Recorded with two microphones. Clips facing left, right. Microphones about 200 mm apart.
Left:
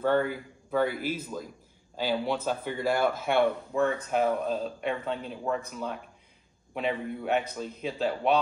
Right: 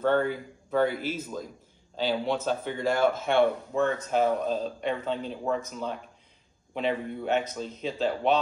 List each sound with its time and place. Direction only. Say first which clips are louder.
0.0 s speech: right 1 dB; 5° left (ahead or behind)
6.7 s speech: right 1 dB; 5° left (ahead or behind)